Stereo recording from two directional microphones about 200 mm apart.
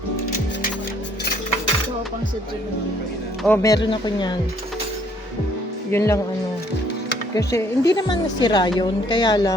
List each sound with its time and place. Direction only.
3.4 s a woman's voice: 15° left (ahead or behind)
5.9 s speech: 15° left (ahead or behind)
7.3 s a woman's voice: 15° left (ahead or behind)